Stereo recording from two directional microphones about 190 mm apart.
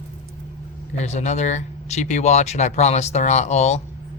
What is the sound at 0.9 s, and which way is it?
Speech, 35° left (ahead or behind).